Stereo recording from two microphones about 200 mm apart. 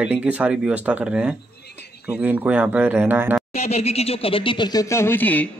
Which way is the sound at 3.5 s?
30° left (ahead or behind).